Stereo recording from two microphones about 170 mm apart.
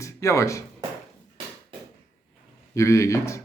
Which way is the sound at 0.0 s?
20° left (ahead or behind).